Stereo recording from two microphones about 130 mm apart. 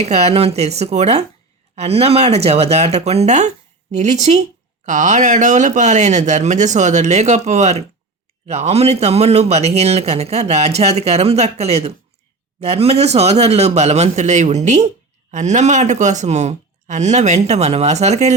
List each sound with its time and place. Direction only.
0.0 s speech: 55° right (ahead or behind)